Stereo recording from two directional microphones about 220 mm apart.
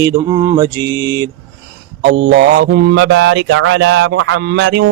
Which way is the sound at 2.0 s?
60° right (ahead or behind).